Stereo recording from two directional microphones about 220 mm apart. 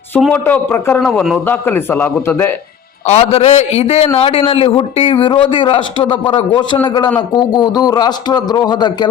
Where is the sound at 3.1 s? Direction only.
30° left (ahead or behind).